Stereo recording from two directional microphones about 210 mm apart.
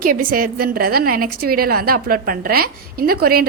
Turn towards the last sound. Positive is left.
turn(degrees=-45)  # may be behind; listen again after turning